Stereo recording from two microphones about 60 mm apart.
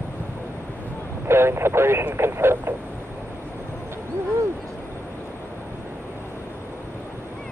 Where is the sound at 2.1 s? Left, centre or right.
Right.